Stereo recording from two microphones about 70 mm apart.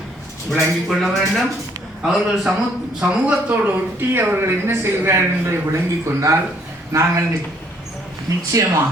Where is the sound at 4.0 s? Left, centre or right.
Right.